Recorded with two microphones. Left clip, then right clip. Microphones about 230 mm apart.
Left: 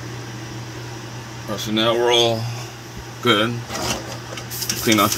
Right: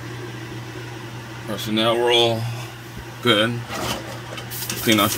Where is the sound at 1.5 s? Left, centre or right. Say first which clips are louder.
Left 1 dB; centre.